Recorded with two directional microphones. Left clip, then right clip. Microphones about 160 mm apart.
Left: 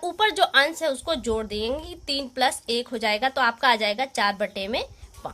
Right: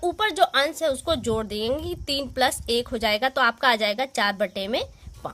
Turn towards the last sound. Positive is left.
turn(degrees=-40)  # may be behind; listen again after turning